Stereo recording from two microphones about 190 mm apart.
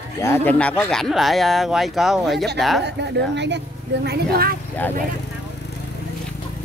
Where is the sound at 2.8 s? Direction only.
65° right (ahead or behind).